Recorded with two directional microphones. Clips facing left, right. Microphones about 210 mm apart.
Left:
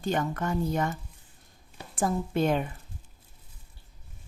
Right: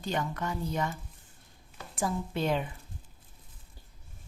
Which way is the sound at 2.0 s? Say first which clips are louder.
Left 5 dB; 50° left (ahead or behind).